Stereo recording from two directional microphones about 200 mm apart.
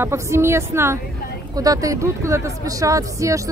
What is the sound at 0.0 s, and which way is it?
Speech, 15° right (ahead or behind).